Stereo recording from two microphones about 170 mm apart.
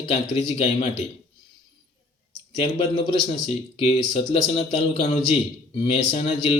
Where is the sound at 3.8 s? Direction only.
40° left (ahead or behind).